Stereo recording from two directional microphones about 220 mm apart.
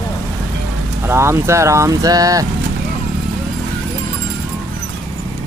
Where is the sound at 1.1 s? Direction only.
10° right (ahead or behind).